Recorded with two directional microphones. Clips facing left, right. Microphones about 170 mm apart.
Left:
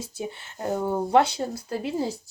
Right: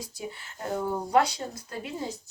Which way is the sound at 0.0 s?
25° left (ahead or behind).